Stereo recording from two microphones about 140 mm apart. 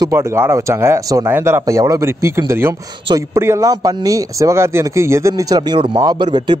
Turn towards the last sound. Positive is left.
turn(degrees=-30)  # may be behind; listen again after turning